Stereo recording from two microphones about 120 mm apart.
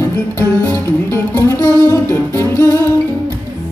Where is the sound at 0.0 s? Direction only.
15° left (ahead or behind).